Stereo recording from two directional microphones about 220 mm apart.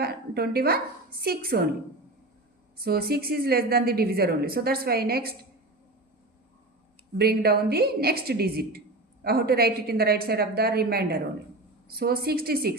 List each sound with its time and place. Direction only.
0.0 s a woman's voice: 45° right (ahead or behind)
2.8 s a woman's voice: 45° right (ahead or behind)
7.2 s a woman's voice: 45° right (ahead or behind)